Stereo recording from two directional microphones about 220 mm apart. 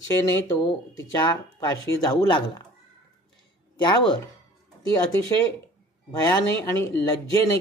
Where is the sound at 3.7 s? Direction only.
20° left (ahead or behind).